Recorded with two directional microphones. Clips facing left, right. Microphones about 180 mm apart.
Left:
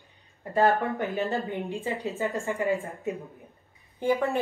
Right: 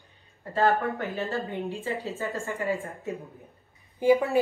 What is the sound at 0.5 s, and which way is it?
Speech, 20° left (ahead or behind).